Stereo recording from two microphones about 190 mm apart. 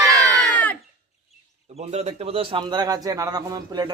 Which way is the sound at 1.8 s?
35° right (ahead or behind).